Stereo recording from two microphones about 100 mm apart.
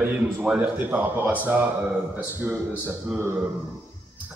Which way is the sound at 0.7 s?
20° right (ahead or behind).